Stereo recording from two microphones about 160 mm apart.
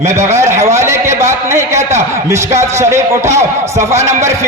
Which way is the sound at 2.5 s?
15° right (ahead or behind).